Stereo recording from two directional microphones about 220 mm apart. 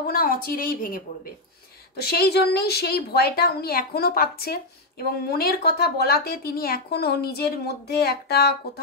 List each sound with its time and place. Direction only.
0.0 s a woman's voice: 45° left (ahead or behind)